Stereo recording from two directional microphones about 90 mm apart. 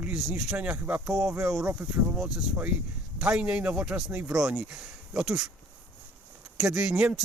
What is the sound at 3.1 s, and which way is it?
Speech, 10° right (ahead or behind).